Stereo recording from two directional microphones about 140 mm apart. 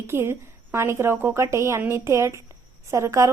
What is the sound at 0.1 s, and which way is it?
A woman's voice, 15° right (ahead or behind).